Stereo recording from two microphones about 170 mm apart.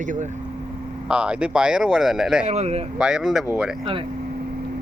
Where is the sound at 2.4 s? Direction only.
40° right (ahead or behind).